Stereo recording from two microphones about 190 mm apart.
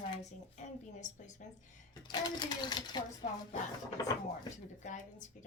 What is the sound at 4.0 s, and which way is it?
Speech, 20° left (ahead or behind).